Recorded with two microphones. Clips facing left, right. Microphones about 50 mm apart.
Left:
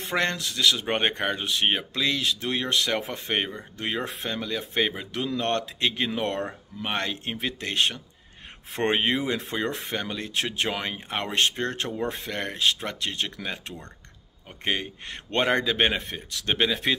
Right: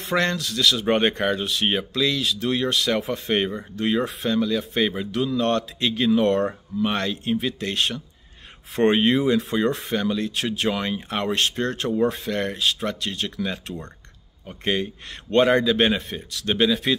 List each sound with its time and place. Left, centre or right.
0.1 s speech: left
2.0 s speech: left
3.0 s speech: centre; by 13.6 s left
14.6 s speech: left
16.3 s speech: left